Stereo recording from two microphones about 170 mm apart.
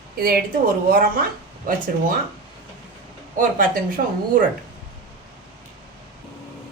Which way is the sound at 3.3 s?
55° right (ahead or behind).